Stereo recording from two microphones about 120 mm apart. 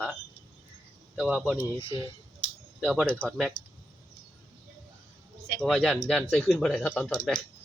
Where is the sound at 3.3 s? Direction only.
5° left (ahead or behind).